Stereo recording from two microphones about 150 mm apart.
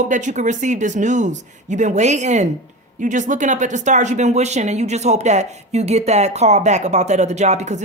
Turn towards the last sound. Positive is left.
turn(degrees=-50)  # may be behind; listen again after turning